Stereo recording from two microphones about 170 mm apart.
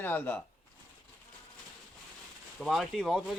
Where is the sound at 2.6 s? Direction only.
Centre (ahead or behind).